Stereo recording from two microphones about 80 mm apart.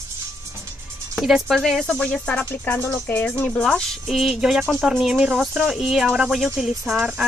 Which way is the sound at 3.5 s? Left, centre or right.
Centre.